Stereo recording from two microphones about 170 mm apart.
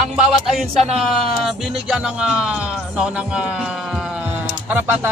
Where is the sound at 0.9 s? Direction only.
Centre (ahead or behind).